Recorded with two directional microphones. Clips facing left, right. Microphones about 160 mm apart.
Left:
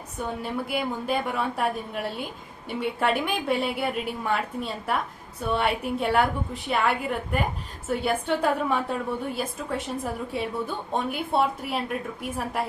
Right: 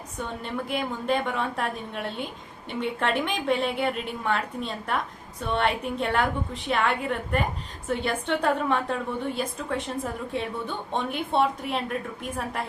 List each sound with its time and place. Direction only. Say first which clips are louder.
0.2 s a woman's voice: left 2 dB; 5° left (ahead or behind)